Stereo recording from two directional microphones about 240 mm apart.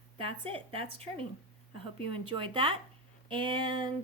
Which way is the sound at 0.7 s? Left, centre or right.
Right.